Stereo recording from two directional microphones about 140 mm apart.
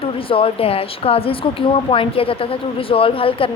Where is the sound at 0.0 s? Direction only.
40° left (ahead or behind).